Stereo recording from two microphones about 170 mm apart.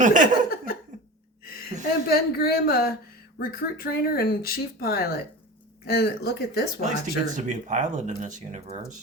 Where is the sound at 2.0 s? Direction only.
65° left (ahead or behind).